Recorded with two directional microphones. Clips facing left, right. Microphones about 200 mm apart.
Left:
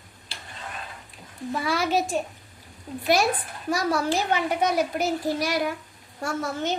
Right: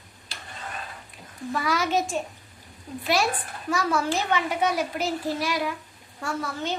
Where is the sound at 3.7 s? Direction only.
40° left (ahead or behind).